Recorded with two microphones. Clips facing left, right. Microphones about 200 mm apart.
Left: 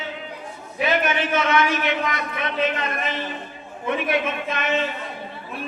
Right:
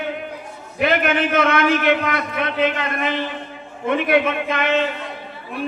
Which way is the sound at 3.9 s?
55° right (ahead or behind).